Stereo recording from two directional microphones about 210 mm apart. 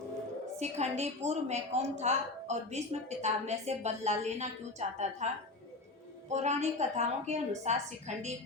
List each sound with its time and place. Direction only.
0.6 s a woman's voice: 30° right (ahead or behind)